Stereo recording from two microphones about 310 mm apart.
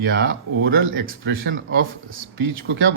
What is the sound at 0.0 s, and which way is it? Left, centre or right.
Speech, right.